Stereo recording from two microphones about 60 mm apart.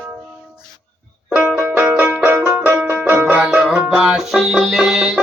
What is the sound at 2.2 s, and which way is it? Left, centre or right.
Music, right.